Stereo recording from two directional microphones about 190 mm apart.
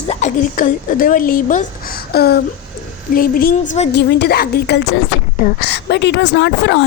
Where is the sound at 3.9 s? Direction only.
65° left (ahead or behind).